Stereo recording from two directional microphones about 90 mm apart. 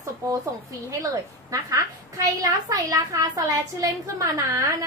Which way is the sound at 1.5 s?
40° right (ahead or behind).